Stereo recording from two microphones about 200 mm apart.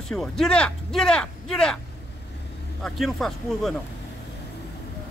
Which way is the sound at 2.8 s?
Centre (ahead or behind).